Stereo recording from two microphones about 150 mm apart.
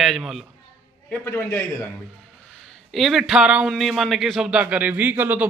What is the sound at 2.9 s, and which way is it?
Speech, centre (ahead or behind).